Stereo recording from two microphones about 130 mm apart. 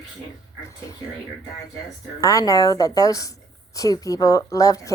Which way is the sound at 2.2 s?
25° left (ahead or behind).